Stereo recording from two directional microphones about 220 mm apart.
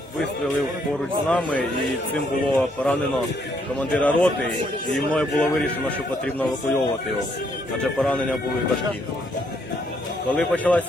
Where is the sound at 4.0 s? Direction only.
5° left (ahead or behind).